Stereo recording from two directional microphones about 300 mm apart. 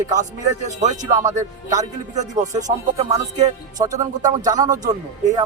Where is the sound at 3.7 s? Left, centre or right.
Centre.